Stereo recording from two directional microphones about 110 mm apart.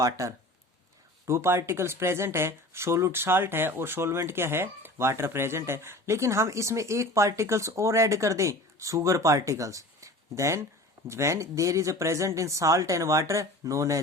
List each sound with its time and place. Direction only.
0.0 s speech: 30° right (ahead or behind)